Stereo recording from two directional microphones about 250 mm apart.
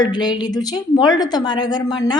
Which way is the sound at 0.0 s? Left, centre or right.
Centre.